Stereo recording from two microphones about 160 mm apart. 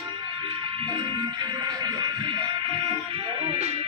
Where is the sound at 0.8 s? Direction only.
30° right (ahead or behind).